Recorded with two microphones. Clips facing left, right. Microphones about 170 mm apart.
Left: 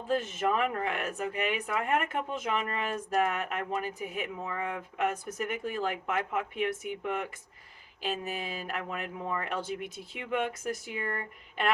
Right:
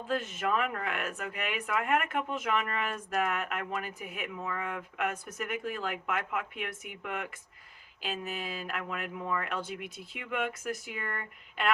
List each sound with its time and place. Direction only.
0.1 s speech: 35° left (ahead or behind)
4.4 s speech: 25° left (ahead or behind)
9.4 s speech: 35° left (ahead or behind)